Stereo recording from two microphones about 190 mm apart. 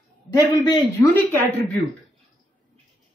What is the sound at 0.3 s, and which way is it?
Speech, 20° left (ahead or behind).